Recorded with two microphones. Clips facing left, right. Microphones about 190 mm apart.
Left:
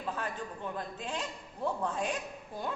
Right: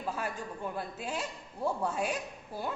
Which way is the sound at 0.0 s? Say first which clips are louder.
Right 1 dB; 10° right (ahead or behind).